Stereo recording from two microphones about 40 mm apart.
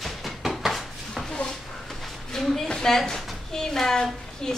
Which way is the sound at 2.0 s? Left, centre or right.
Centre.